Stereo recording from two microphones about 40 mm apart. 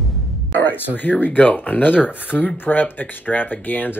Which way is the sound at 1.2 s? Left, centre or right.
Left.